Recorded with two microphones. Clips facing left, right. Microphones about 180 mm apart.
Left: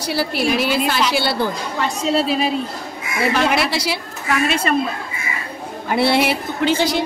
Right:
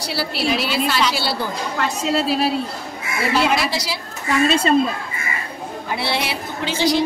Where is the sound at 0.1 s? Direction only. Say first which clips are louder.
Left 3 dB; 50° left (ahead or behind).